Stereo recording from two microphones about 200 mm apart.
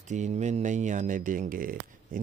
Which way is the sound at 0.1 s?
35° right (ahead or behind).